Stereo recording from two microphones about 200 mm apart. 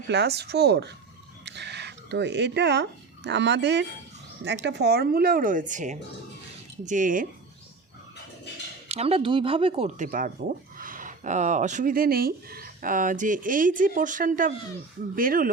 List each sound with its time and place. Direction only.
0.1 s speech: 55° right (ahead or behind)
8.9 s speech: 30° right (ahead or behind)